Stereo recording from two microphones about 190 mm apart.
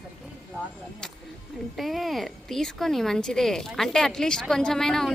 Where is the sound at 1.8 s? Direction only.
Centre (ahead or behind).